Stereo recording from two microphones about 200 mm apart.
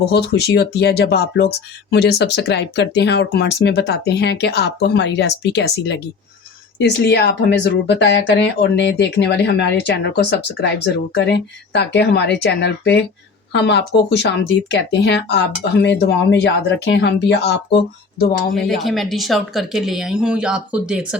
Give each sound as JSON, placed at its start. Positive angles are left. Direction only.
{"t": 0.0, "sound": "speech", "side_deg": 55}
{"t": 18.5, "sound": "speech", "side_deg": 0}